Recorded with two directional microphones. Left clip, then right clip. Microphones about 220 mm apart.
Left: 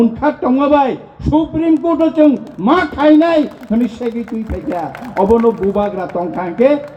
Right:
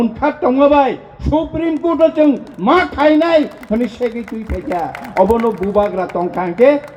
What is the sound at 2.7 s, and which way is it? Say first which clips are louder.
A man's voice: even; 55° right (ahead or behind).